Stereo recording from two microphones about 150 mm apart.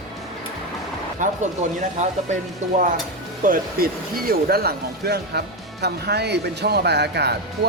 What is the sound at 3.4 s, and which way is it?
Speech, 70° right (ahead or behind).